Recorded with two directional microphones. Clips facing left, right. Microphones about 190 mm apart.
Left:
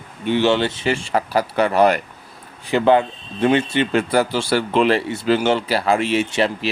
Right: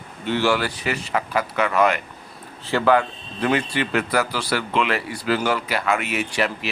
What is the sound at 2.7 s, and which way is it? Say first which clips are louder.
Speech: left 3 dB; 20° left (ahead or behind).